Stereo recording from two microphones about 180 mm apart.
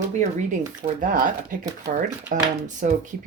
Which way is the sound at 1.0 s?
50° right (ahead or behind).